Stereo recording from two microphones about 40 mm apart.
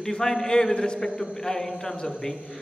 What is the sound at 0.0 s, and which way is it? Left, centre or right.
A man's voice, centre.